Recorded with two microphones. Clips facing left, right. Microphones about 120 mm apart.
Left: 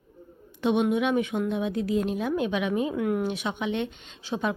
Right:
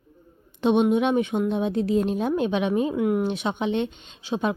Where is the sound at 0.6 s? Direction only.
25° right (ahead or behind).